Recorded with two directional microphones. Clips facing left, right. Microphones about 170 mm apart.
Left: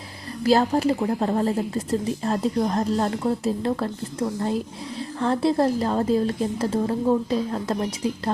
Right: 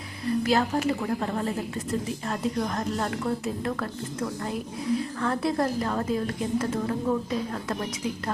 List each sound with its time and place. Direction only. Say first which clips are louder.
0.4 s a woman's voice: left 7 dB; 35° left (ahead or behind)